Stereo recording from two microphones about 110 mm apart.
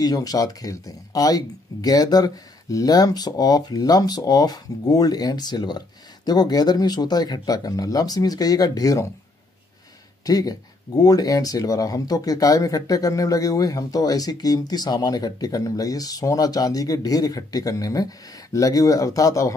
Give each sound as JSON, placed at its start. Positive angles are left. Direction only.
{"t": 0.0, "sound": "speech", "side_deg": 35}
{"t": 10.2, "sound": "speech", "side_deg": 35}